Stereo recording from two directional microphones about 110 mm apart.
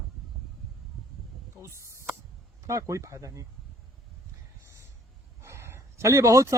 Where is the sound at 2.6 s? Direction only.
25° right (ahead or behind).